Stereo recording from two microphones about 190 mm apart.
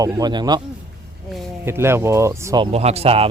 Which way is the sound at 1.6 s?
15° right (ahead or behind).